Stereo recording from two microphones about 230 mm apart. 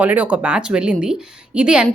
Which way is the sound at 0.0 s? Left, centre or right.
Centre.